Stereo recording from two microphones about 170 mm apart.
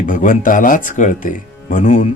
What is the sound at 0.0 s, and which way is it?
Speech, 50° left (ahead or behind).